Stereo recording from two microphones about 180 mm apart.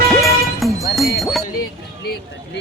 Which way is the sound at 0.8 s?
Centre (ahead or behind).